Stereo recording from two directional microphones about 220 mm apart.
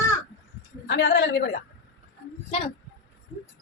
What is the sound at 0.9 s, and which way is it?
Speech, 55° left (ahead or behind).